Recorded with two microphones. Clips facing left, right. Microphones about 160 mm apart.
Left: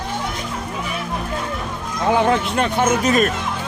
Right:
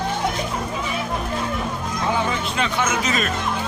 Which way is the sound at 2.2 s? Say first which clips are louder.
Left 6 dB; 60° left (ahead or behind).